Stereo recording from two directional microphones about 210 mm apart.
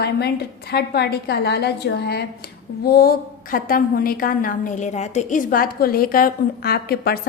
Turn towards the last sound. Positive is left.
turn(degrees=45)  # may be behind; listen again after turning